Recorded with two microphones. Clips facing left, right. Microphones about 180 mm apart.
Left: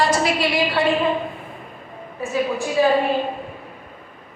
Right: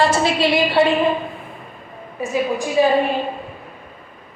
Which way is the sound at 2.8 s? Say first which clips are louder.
Right 1 dB; 15° right (ahead or behind).